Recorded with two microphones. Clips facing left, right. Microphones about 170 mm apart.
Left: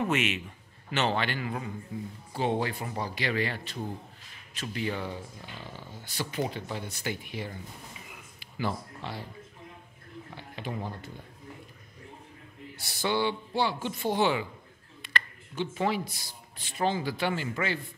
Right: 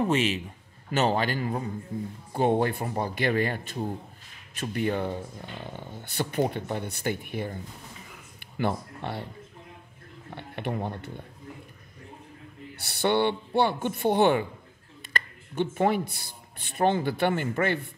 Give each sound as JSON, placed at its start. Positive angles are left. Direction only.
{"t": 0.0, "sound": "a man's voice", "side_deg": -35}
{"t": 2.3, "sound": "speech", "side_deg": -50}
{"t": 10.3, "sound": "speech", "side_deg": -60}
{"t": 13.0, "sound": "speech", "side_deg": -60}
{"t": 15.0, "sound": "a sound", "side_deg": -50}
{"t": 16.7, "sound": "speech", "side_deg": -55}